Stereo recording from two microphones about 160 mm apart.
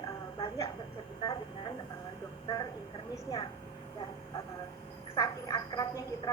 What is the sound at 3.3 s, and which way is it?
Speech, 25° left (ahead or behind).